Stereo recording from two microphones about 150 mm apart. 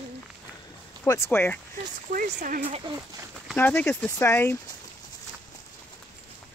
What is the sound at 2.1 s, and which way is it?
Speech, 65° right (ahead or behind).